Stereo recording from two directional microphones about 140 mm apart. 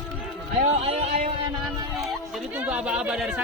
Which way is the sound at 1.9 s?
Centre (ahead or behind).